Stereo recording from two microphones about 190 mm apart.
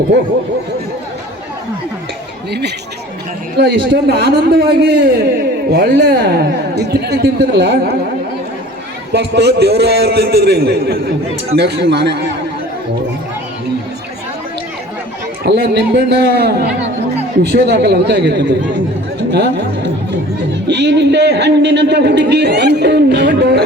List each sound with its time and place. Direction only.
2.5 s a man's voice: 60° right (ahead or behind)
3.8 s a man's voice: 60° right (ahead or behind)
9.1 s a man's voice: 65° right (ahead or behind)
15.4 s a man's voice: 60° right (ahead or behind)